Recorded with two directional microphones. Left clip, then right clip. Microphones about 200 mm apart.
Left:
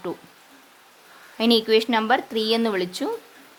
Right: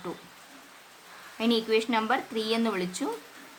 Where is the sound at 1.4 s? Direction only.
40° left (ahead or behind).